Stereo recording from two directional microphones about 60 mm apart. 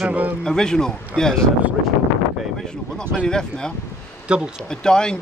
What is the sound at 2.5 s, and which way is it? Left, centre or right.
Speech, centre.